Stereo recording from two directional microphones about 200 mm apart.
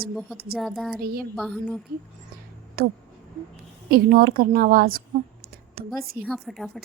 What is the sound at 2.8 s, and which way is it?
A woman's voice, 50° right (ahead or behind).